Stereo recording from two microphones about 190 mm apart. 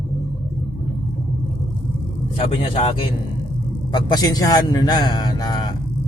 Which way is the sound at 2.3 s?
30° left (ahead or behind).